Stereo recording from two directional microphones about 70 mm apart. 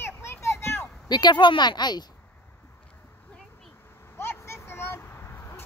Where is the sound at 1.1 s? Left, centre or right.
Left.